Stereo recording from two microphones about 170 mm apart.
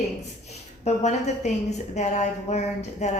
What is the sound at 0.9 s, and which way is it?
A woman's voice, 40° left (ahead or behind).